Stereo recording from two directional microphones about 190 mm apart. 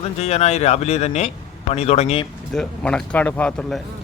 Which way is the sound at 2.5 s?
5° left (ahead or behind).